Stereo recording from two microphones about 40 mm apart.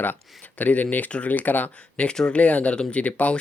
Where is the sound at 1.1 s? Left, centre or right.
Left.